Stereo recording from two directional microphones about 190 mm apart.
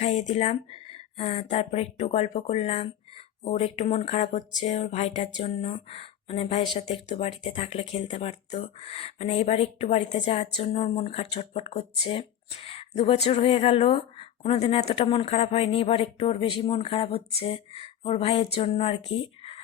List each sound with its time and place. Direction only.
0.0 s a woman's voice: 35° left (ahead or behind)